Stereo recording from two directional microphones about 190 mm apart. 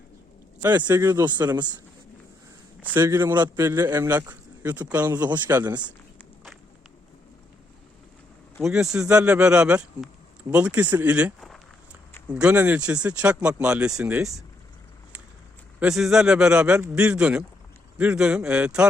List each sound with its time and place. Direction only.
0.8 s speech: 15° right (ahead or behind)
2.8 s a man's voice: 15° right (ahead or behind)
8.6 s a man's voice: 5° right (ahead or behind)
15.8 s speech: 5° right (ahead or behind)